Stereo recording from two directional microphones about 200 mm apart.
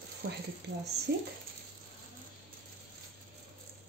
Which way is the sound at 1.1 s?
55° right (ahead or behind).